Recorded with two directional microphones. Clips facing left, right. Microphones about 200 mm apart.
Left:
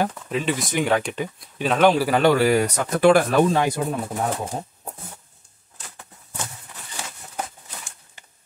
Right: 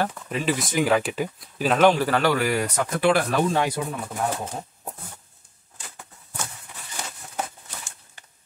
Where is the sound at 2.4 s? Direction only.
45° left (ahead or behind).